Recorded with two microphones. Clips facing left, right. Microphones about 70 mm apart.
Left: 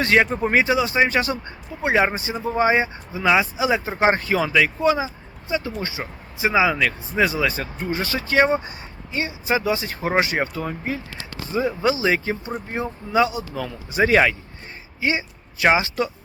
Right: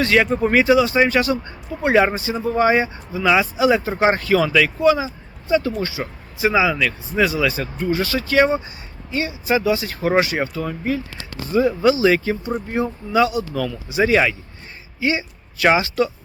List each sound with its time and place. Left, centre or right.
0.0 s speech: left
1.8 s speech: centre
13.9 s speech: left
15.0 s speech: left